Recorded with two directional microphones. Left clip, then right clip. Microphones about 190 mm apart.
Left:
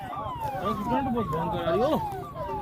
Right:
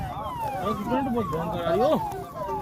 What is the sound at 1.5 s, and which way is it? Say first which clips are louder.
Speech: right 2 dB; 35° left (ahead or behind).